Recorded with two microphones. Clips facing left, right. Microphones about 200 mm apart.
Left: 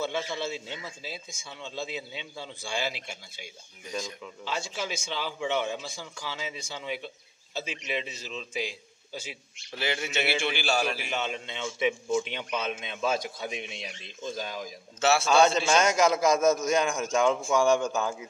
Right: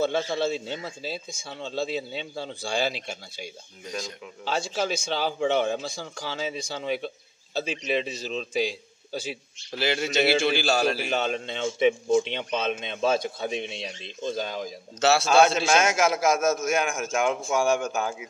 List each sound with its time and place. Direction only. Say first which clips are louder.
0.0 s a man's voice: right 6 dB; 35° right (ahead or behind)
9.8 s a man's voice: right 5 dB; 85° right
10.0 s a man's voice: right 9 dB; 35° right (ahead or behind)
12.1 s speech: right 5 dB; 25° right (ahead or behind)
15.8 s a man's voice: even; 5° right (ahead or behind)